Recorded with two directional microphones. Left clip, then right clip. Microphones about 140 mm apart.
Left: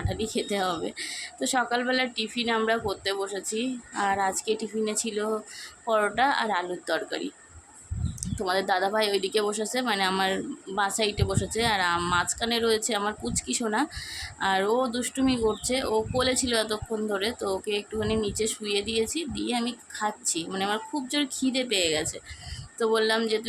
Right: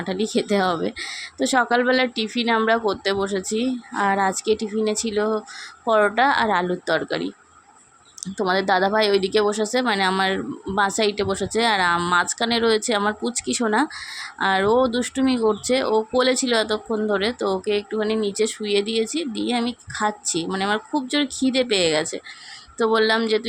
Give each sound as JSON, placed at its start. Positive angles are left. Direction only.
{"t": 0.0, "sound": "a woman's voice", "side_deg": -45}